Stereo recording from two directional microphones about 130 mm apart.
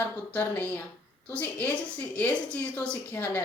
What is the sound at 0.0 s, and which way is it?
A woman's voice, 15° left (ahead or behind).